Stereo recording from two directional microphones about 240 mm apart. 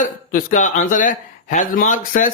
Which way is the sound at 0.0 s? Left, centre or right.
Left.